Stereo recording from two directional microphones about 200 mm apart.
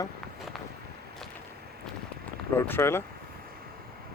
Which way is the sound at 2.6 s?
10° left (ahead or behind).